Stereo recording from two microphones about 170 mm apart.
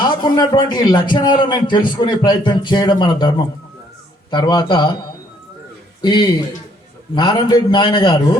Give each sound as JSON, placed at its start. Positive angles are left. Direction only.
{"t": 0.0, "sound": "a man's voice", "side_deg": 25}
{"t": 6.0, "sound": "a man's voice", "side_deg": 25}